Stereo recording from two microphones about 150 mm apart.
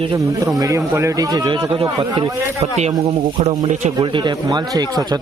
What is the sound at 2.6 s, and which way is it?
Speech, 45° right (ahead or behind).